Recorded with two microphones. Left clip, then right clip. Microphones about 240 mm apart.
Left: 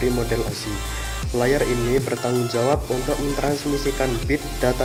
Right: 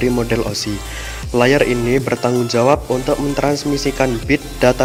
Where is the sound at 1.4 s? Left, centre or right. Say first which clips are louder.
Right 7 dB; right.